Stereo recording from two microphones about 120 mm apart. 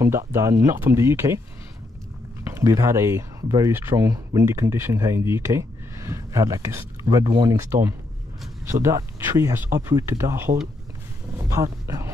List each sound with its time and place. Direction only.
0.3 s speech: 25° right (ahead or behind)
2.5 s speech: 25° right (ahead or behind)